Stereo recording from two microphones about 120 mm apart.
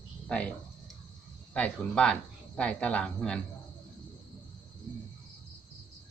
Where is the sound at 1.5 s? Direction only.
10° left (ahead or behind).